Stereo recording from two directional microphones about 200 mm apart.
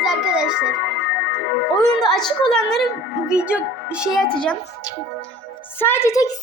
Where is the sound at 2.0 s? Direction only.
Centre (ahead or behind).